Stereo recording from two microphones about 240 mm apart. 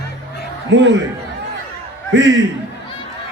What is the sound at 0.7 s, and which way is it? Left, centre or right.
Speech, right.